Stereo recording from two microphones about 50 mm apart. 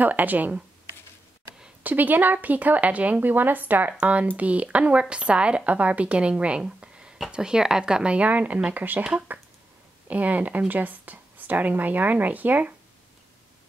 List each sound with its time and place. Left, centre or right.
0.0 s speech: right
1.8 s speech: right
3.2 s speech: right
4.0 s speech: right
8.3 s speech: right